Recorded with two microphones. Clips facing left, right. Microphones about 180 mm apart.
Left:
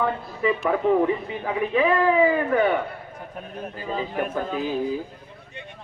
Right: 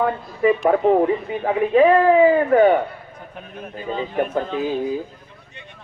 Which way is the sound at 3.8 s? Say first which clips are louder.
Right 3 dB; 5° left (ahead or behind).